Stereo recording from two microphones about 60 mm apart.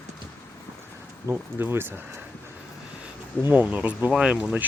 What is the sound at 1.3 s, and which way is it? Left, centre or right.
Speech, right.